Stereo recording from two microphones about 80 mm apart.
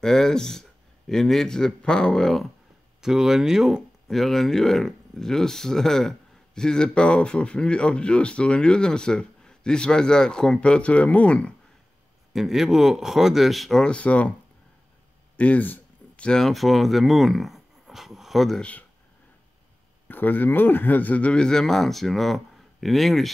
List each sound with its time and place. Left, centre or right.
0.0 s speech: centre
3.0 s speech: centre
12.3 s speech: centre
15.3 s a sound: centre
16.3 s speech: centre
18.6 s speech: centre
20.1 s speech: left; by 23.3 s centre